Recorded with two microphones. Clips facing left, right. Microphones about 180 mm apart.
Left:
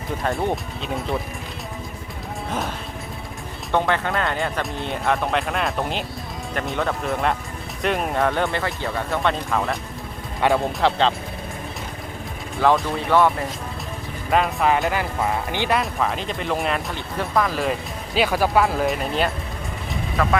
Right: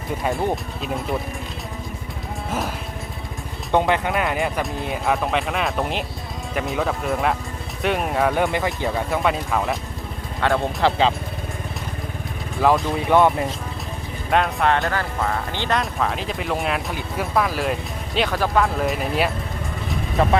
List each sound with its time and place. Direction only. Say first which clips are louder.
0.2 s speech: even; 5° right (ahead or behind)
2.5 s speech: right 1 dB; 5° right (ahead or behind)
3.7 s speech: right 2 dB; 15° right (ahead or behind)
12.6 s speech: even; 5° right (ahead or behind)
13.1 s speech: right 2 dB; 20° right (ahead or behind)
14.3 s speech: even; centre (ahead or behind)
15.8 s speech: even; centre (ahead or behind)
20.2 s speech: right 3 dB; 25° right (ahead or behind)